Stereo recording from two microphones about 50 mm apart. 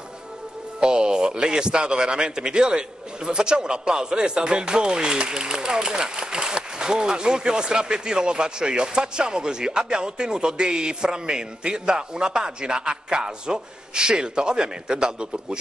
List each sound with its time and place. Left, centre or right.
0.7 s speech: centre